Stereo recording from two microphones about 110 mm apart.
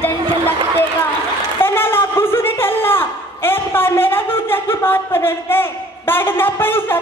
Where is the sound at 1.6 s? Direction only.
20° left (ahead or behind).